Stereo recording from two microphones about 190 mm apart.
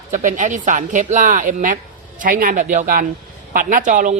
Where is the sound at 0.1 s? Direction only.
40° right (ahead or behind).